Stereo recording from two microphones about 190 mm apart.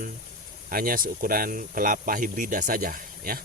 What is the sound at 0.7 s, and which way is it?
Speech, 50° right (ahead or behind).